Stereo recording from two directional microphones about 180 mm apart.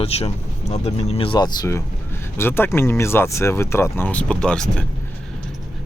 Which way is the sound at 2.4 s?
15° left (ahead or behind).